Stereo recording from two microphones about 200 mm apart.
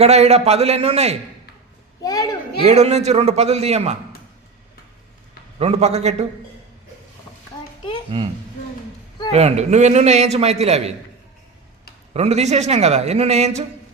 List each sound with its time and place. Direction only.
0.0 s a man's voice: 30° right (ahead or behind)
2.0 s a child's voice: 20° left (ahead or behind)
2.6 s a man's voice: 30° right (ahead or behind)
5.5 s a man's voice: 30° right (ahead or behind)
9.3 s a man's voice: 35° right (ahead or behind)
12.1 s a man's voice: 35° right (ahead or behind)